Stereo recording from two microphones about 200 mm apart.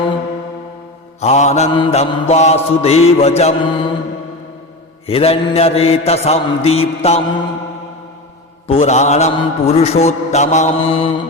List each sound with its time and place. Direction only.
1.2 s mantra: 35° left (ahead or behind)
5.0 s mantra: 30° left (ahead or behind)
8.6 s mantra: 30° left (ahead or behind)